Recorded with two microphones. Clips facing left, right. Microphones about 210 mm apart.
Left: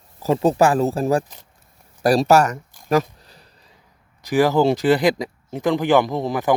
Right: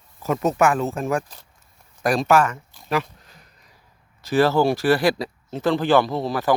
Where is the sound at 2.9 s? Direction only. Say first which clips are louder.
Left 5 dB; 40° left (ahead or behind).